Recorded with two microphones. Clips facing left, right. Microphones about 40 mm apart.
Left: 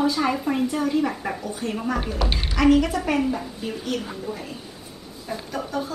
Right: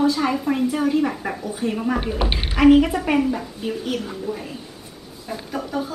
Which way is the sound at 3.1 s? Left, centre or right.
Centre.